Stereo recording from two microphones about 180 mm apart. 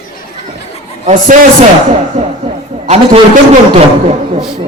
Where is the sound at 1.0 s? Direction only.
45° right (ahead or behind).